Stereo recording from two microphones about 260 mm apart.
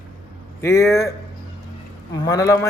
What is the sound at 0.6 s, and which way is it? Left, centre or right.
A man's voice, centre.